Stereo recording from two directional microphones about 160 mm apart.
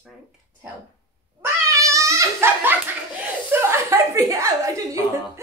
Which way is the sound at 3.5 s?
15° right (ahead or behind).